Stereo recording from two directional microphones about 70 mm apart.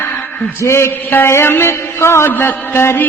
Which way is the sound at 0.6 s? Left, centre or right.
Left.